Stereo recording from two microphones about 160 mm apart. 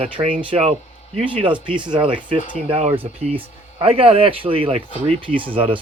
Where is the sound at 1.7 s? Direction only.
30° right (ahead or behind).